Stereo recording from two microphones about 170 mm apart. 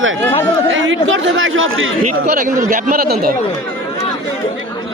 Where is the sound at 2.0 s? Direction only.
50° right (ahead or behind).